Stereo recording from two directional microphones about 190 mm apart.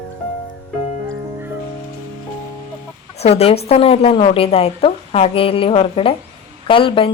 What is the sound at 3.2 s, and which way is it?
A woman's voice, 30° left (ahead or behind).